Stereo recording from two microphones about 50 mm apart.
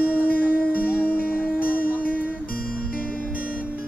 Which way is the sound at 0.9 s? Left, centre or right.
Left.